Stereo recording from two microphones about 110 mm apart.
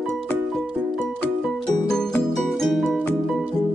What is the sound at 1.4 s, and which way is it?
Music, 5° left (ahead or behind).